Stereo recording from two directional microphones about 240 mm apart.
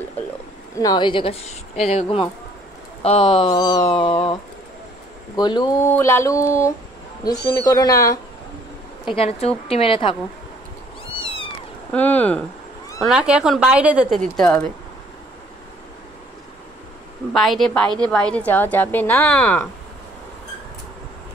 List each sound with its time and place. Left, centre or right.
0.7 s a woman's voice: centre
9.1 s speech: left
11.9 s speech: centre
17.3 s a woman's voice: centre